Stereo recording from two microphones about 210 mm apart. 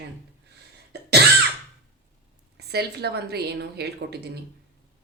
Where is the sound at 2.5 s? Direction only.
50° right (ahead or behind).